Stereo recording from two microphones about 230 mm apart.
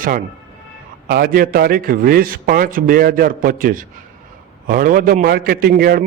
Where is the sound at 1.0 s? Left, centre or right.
Right.